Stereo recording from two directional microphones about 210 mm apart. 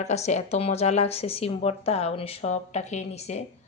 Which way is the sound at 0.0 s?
30° left (ahead or behind).